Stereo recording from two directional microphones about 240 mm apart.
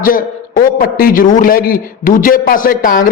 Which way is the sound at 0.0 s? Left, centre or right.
Left.